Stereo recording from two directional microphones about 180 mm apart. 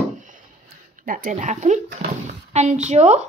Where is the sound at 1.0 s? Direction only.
50° right (ahead or behind).